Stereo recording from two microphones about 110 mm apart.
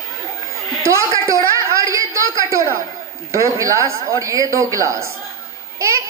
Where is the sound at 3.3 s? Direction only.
30° right (ahead or behind).